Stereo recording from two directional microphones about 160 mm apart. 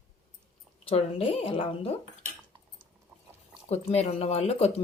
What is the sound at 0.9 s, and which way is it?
Speech, 35° left (ahead or behind).